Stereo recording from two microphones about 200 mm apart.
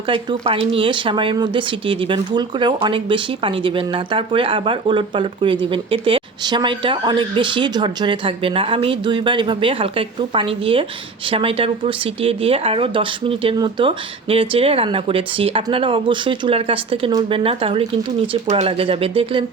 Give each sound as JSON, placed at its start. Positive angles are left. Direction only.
{"t": 0.1, "sound": "speech", "side_deg": -25}